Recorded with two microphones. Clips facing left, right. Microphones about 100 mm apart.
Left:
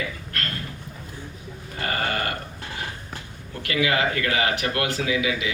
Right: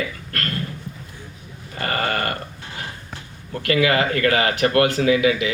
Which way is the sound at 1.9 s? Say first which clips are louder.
Right 3 dB; 55° right (ahead or behind).